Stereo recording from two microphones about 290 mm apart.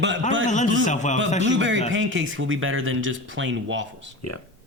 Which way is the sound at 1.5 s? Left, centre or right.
Right.